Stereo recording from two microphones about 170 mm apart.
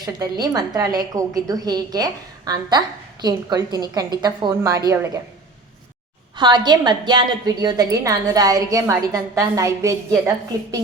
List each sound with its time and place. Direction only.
0.0 s a woman's voice: 25° right (ahead or behind)
6.3 s a woman's voice: 25° right (ahead or behind)